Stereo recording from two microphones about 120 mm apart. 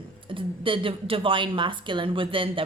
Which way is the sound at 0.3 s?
45° right (ahead or behind).